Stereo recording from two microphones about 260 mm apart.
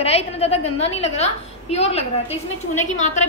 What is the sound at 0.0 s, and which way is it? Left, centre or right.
A woman's voice, left.